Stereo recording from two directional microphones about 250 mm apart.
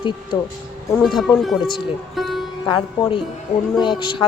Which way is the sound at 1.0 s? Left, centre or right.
Centre.